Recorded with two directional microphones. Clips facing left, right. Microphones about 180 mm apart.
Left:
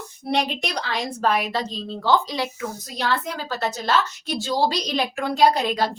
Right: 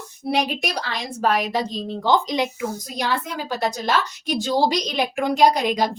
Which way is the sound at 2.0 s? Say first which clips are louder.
Right 1 dB; 20° right (ahead or behind).